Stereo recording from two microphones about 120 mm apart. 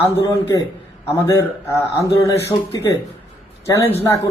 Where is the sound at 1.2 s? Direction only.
25° left (ahead or behind).